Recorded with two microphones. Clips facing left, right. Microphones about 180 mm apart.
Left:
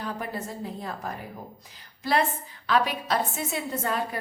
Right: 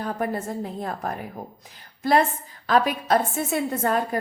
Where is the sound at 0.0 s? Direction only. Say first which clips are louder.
Right 6 dB; 50° right (ahead or behind).